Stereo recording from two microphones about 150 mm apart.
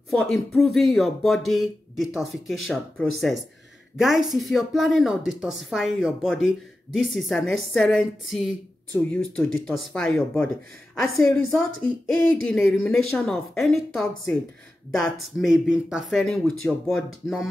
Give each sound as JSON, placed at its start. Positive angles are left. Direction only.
{"t": 0.1, "sound": "speech", "side_deg": 0}
{"t": 11.0, "sound": "a woman's voice", "side_deg": 20}
{"t": 12.1, "sound": "speech", "side_deg": 5}